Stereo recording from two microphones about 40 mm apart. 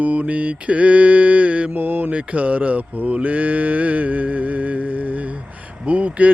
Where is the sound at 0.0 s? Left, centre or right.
Right.